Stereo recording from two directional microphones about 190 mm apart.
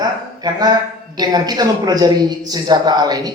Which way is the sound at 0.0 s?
20° right (ahead or behind).